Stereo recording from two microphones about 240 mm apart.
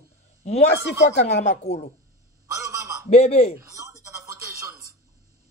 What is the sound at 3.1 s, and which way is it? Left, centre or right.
Speech, left.